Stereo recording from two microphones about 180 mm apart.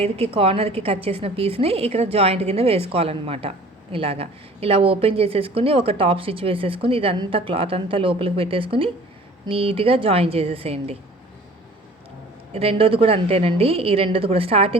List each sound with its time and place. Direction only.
0.0 s a woman's voice: 30° right (ahead or behind)
12.5 s a woman's voice: 30° right (ahead or behind)